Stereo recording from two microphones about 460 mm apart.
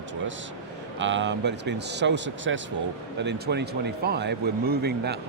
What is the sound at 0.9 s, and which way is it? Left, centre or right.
Speech, right.